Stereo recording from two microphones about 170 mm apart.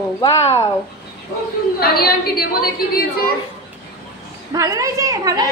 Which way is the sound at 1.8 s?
65° left (ahead or behind).